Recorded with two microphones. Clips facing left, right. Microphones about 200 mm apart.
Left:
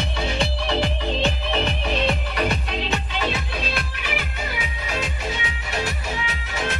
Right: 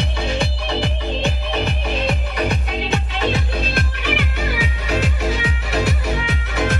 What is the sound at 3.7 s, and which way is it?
Music, 65° right (ahead or behind).